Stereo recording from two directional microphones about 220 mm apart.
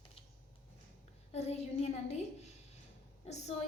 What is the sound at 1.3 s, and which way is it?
A woman's voice, 30° left (ahead or behind).